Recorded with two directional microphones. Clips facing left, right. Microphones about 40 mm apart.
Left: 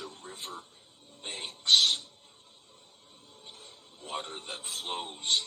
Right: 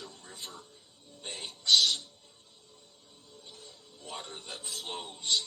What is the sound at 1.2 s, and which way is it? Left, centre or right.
Music, left.